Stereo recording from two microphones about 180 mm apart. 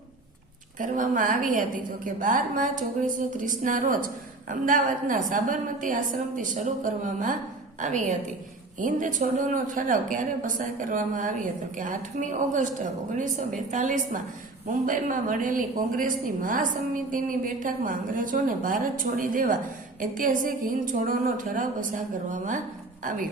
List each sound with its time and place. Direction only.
0.8 s a woman's voice: 45° right (ahead or behind)